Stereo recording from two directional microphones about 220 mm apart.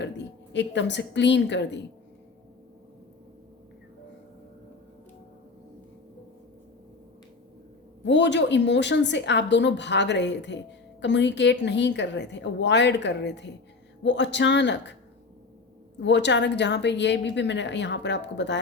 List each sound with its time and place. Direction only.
0.5 s a woman's voice: 55° left (ahead or behind)
8.0 s a woman's voice: 55° left (ahead or behind)
16.0 s a woman's voice: 55° left (ahead or behind)